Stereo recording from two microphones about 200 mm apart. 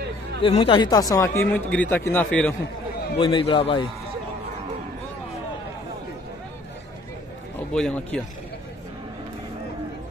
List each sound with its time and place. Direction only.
0.4 s speech: 30° left (ahead or behind); by 2.5 s 5° left (ahead or behind)
3.2 s a man's voice: 25° left (ahead or behind)
7.7 s speech: 5° left (ahead or behind)